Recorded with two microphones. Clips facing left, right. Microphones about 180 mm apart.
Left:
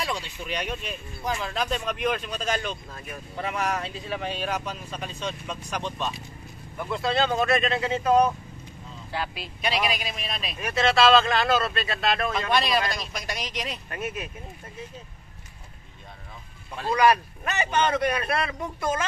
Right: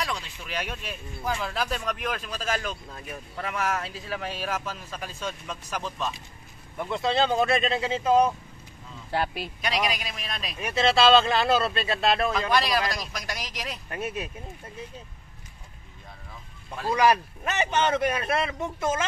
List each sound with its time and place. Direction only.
0.0 s speech: centre (ahead or behind)
6.8 s speech: 25° right (ahead or behind)
9.1 s speech: 50° right (ahead or behind)
9.6 s speech: centre (ahead or behind)
10.6 s speech: 30° right (ahead or behind)
12.4 s speech: centre (ahead or behind)
13.8 s speech: 30° right (ahead or behind)
17.6 s speech: 25° right (ahead or behind)